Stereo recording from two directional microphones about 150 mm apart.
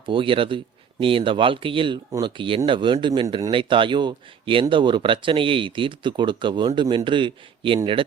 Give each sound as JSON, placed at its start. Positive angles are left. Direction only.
{"t": 0.0, "sound": "speech", "side_deg": -35}